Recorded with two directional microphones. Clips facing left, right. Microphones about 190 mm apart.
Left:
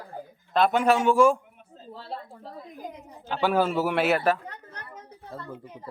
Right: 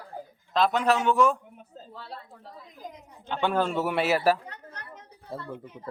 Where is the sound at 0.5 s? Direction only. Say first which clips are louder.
Left 2 dB; 5° left (ahead or behind).